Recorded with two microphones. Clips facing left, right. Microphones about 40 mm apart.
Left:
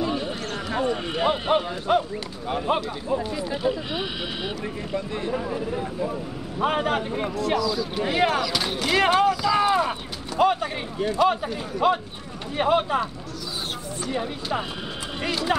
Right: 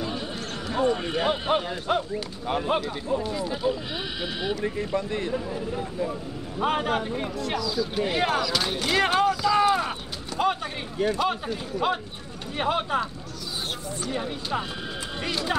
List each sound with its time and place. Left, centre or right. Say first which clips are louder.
0.1 s basketball bounce: left 4 dB; centre
0.8 s a man's voice: even; centre
3.1 s speech: left 1 dB; centre
4.6 s speech: right 2 dB; centre
5.7 s a man's voice: left 2 dB; centre
6.6 s a man's voice: left 2 dB; centre
7.3 s a man's voice: left 5 dB; centre
14.1 s a man's voice: left 2 dB; centre